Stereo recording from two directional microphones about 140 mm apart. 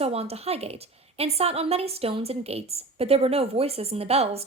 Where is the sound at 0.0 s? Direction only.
45° right (ahead or behind).